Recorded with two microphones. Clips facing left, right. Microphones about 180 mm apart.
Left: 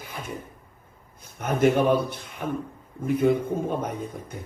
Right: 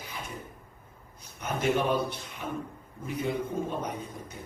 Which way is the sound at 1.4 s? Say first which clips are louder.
Left 7 dB; 50° left (ahead or behind).